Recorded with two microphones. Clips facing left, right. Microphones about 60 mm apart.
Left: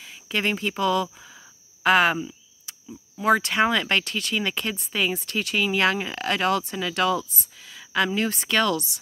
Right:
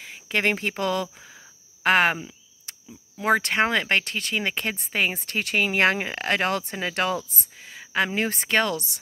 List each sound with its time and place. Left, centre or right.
0.0 s speech: right
1.1 s a sound: right
3.2 s speech: right